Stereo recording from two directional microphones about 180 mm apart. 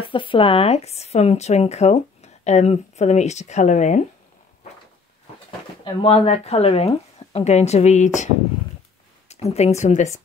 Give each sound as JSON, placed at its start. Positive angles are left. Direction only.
{"t": 0.0, "sound": "speech", "side_deg": 30}
{"t": 6.0, "sound": "speech", "side_deg": 35}
{"t": 9.3, "sound": "speech", "side_deg": 35}